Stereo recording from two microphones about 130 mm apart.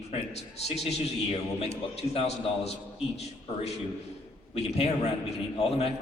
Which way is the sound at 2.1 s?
55° left (ahead or behind).